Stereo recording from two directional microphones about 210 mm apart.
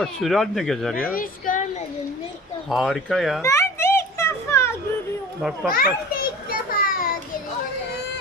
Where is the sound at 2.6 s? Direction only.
Centre (ahead or behind).